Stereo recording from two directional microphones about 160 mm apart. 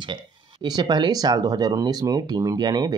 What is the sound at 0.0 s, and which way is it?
Speech, 30° right (ahead or behind).